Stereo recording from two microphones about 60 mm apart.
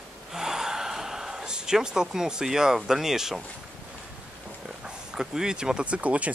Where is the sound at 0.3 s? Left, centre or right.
Centre.